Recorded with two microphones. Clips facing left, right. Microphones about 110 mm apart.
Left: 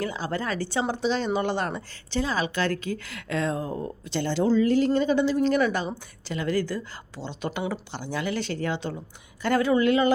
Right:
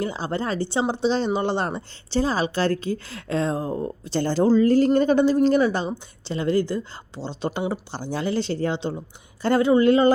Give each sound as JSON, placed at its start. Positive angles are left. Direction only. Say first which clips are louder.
{"t": 0.0, "sound": "a woman's voice", "louder": "right 3 dB", "side_deg": -30}